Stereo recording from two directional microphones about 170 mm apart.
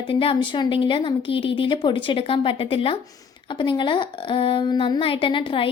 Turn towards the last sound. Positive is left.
turn(degrees=30)  # may be behind; listen again after turning